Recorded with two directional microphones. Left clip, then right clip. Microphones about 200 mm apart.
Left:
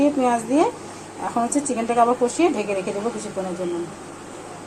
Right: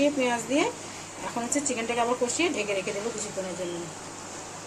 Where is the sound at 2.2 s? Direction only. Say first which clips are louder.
Left 7 dB; 10° left (ahead or behind).